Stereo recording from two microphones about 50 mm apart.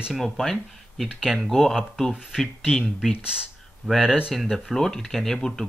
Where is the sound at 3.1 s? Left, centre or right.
Centre.